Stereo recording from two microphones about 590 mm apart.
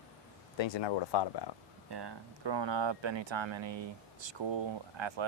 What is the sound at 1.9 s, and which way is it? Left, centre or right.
Speech, right.